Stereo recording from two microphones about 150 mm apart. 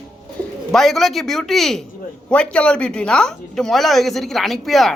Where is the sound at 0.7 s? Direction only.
Centre (ahead or behind).